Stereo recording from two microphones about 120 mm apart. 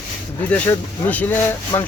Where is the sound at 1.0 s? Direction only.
15° left (ahead or behind).